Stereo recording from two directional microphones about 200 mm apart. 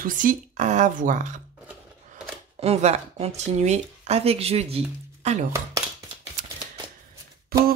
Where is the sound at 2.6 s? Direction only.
30° right (ahead or behind).